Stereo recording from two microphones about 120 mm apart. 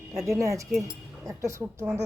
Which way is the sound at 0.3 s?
25° right (ahead or behind).